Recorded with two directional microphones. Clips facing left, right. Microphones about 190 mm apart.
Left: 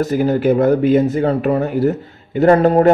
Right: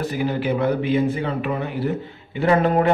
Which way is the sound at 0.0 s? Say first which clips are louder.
Left 8 dB; 45° left (ahead or behind).